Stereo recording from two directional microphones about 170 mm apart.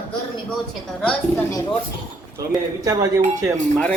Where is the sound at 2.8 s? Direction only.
20° right (ahead or behind).